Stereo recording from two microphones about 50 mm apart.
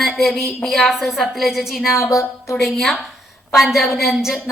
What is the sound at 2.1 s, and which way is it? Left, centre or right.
Speech, left.